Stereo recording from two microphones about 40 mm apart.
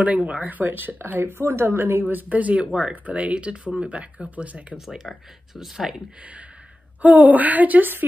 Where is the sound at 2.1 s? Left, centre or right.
Right.